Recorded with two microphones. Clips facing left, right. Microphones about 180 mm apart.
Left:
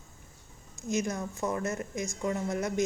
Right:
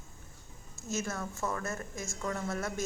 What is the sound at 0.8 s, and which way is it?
A woman's voice, 15° left (ahead or behind).